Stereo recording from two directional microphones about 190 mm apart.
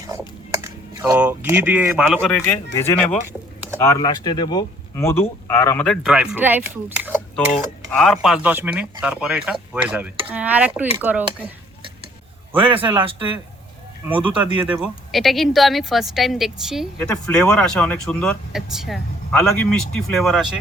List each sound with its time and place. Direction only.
0.6 s speech: 15° right (ahead or behind)
2.0 s speech: 5° left (ahead or behind)
5.8 s speech: centre (ahead or behind)
7.9 s speech: centre (ahead or behind)
12.7 s speech: 25° right (ahead or behind)
14.5 s speech: 5° right (ahead or behind)
17.0 s speech: 10° left (ahead or behind)